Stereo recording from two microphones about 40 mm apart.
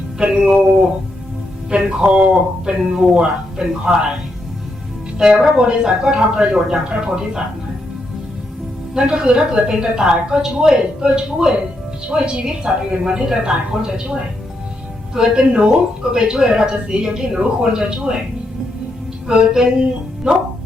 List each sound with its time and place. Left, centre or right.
0.2 s a woman's voice: right
5.1 s a woman's voice: centre
6.0 s a woman's voice: centre
9.0 s a woman's voice: right
19.6 s a woman's voice: centre